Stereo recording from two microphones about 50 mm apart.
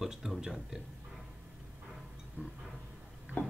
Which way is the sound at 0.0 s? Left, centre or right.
Centre.